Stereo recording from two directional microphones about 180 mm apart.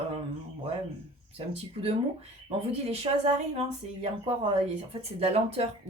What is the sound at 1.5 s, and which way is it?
Speech, 35° right (ahead or behind).